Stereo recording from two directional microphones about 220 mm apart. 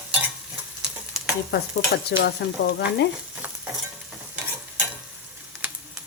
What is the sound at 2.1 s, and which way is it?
Speech, 50° left (ahead or behind).